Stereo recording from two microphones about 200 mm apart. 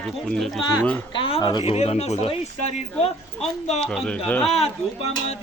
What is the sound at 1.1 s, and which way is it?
Speech, 25° left (ahead or behind).